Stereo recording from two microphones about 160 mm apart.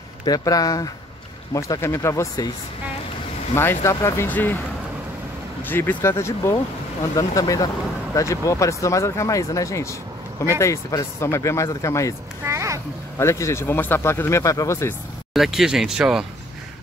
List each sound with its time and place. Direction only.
0.2 s speech: 25° left (ahead or behind)
3.5 s speech: 15° left (ahead or behind)
5.6 s speech: 10° left (ahead or behind)
12.4 s a sound: 20° right (ahead or behind)
13.2 s speech: 15° left (ahead or behind)
15.3 s speech: centre (ahead or behind)